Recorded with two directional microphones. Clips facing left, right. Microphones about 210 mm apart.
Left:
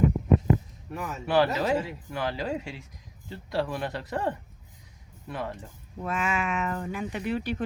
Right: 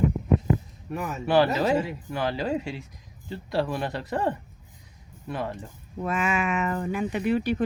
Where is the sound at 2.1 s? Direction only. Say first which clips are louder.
Right 3 dB; 30° right (ahead or behind).